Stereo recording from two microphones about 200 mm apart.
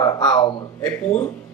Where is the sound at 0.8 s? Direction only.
5° left (ahead or behind).